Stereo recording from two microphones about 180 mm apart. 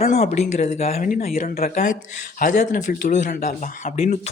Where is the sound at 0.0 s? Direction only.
40° left (ahead or behind).